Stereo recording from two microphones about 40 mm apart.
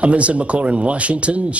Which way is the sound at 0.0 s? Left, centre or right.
Right.